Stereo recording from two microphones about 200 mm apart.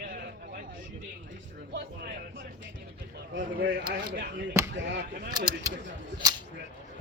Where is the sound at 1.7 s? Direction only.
60° right (ahead or behind).